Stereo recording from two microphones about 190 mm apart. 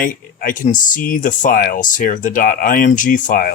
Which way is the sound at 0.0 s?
45° left (ahead or behind).